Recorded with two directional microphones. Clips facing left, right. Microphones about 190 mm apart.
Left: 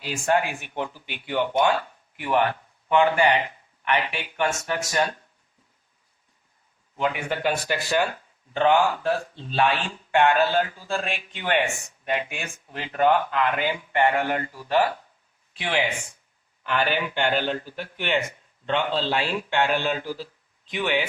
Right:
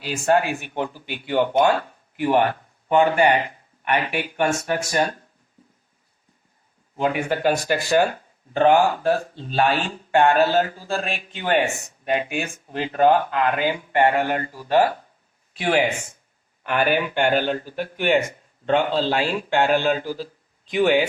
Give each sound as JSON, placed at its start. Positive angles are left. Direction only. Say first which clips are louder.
{"t": 0.1, "sound": "speech", "louder": "right 4 dB", "side_deg": -40}
{"t": 7.0, "sound": "a man's voice", "louder": "right 4 dB", "side_deg": -40}